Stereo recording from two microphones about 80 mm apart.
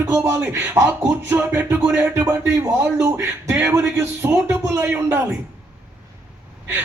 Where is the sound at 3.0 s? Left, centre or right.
Right.